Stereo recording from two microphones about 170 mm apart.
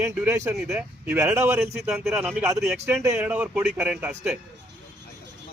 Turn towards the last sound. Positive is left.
turn(degrees=-10)  # may be behind; listen again after turning